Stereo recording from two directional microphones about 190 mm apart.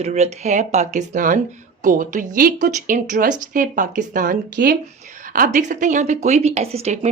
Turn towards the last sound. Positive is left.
turn(degrees=-35)  # may be behind; listen again after turning